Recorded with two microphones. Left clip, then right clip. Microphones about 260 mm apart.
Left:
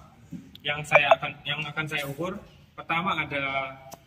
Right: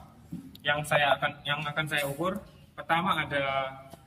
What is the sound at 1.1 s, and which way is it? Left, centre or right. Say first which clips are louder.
A man's voice: right 1 dB; centre.